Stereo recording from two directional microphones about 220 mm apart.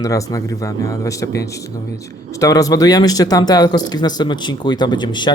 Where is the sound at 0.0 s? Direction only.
15° left (ahead or behind).